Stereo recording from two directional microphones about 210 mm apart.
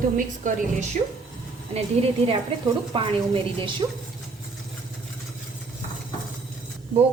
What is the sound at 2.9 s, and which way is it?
Speech, 25° right (ahead or behind).